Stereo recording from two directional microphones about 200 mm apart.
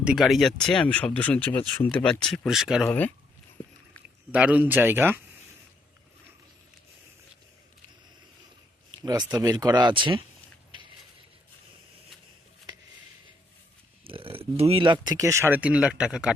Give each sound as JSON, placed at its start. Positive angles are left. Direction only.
{"t": 0.0, "sound": "speech", "side_deg": -5}
{"t": 2.8, "sound": "speech", "side_deg": 10}
{"t": 4.3, "sound": "speech", "side_deg": -5}
{"t": 9.0, "sound": "speech", "side_deg": -20}
{"t": 14.0, "sound": "speech", "side_deg": -25}